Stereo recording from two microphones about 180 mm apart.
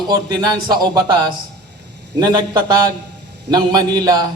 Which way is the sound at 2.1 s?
20° right (ahead or behind).